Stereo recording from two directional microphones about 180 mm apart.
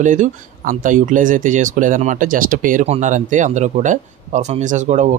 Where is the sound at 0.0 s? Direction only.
45° right (ahead or behind).